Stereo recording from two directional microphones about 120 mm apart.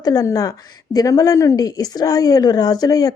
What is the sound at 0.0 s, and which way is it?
A woman's voice, 30° left (ahead or behind).